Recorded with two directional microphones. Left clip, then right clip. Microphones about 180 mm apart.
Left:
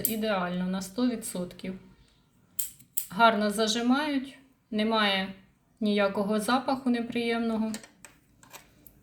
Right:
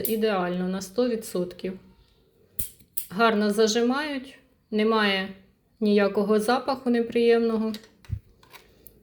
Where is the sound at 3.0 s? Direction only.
30° right (ahead or behind).